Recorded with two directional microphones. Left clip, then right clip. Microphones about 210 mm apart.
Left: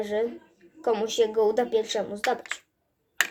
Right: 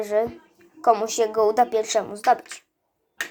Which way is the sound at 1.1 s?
55° right (ahead or behind).